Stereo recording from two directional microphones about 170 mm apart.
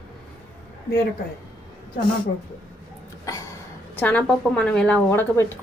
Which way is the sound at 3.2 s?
20° left (ahead or behind).